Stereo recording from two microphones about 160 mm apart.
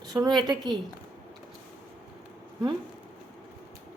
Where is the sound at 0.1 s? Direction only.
25° right (ahead or behind).